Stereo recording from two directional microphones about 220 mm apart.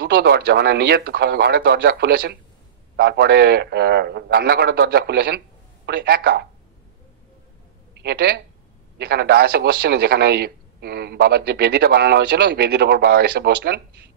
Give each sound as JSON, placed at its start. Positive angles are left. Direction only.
{"t": 0.0, "sound": "speech", "side_deg": -50}
{"t": 8.0, "sound": "speech", "side_deg": -50}